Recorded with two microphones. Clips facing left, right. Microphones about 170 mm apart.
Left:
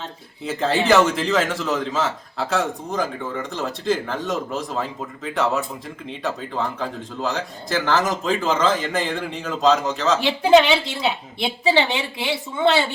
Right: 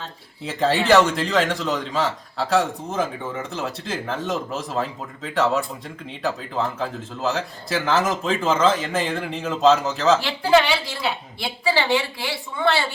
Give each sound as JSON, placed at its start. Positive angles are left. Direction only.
{"t": 0.4, "sound": "a man's voice", "side_deg": 0}
{"t": 10.2, "sound": "a woman's voice", "side_deg": 20}